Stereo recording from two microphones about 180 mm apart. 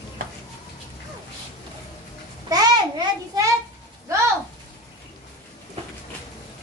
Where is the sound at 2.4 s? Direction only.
20° right (ahead or behind).